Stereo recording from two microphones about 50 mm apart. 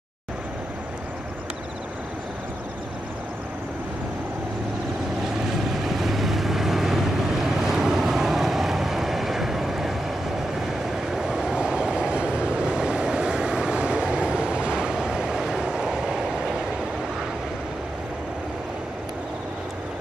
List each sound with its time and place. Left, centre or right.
5.9 s vehicle: centre
11.1 s vehicle: centre